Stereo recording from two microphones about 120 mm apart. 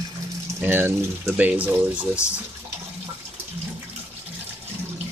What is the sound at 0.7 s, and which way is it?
Speech, 15° right (ahead or behind).